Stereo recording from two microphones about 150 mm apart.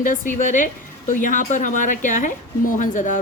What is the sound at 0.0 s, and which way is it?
A woman's voice, 60° left (ahead or behind).